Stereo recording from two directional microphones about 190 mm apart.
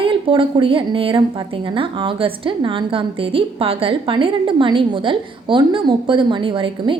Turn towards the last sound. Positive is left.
turn(degrees=-25)  # may be behind; listen again after turning